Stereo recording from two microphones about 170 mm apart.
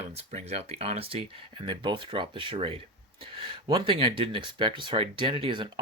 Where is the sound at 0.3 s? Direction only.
40° right (ahead or behind).